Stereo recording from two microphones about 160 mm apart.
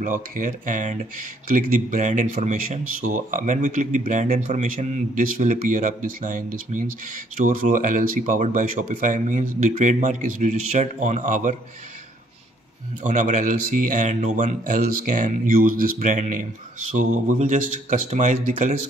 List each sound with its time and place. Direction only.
0.0 s speech: 55° right (ahead or behind)
13.0 s speech: 50° right (ahead or behind)